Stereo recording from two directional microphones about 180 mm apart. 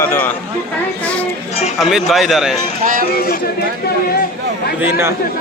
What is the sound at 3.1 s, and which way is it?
Speech, 55° left (ahead or behind).